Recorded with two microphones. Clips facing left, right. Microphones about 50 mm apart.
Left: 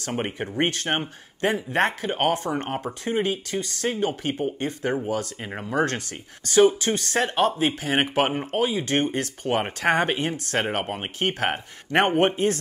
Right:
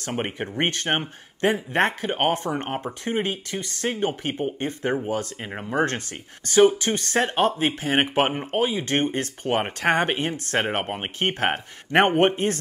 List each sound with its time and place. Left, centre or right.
0.2 s speech: right